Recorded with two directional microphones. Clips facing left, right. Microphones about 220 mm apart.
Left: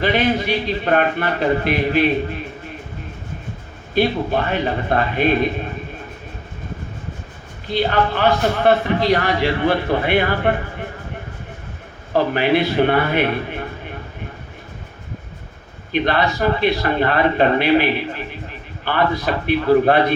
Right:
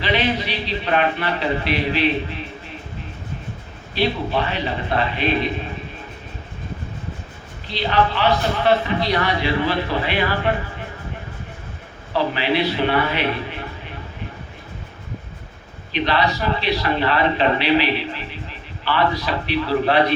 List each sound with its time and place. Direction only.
0.0 s a man's voice: 50° left (ahead or behind)
3.9 s a man's voice: 50° left (ahead or behind)
7.7 s a man's voice: 50° left (ahead or behind)
12.1 s a man's voice: 50° left (ahead or behind)
15.9 s a man's voice: 50° left (ahead or behind)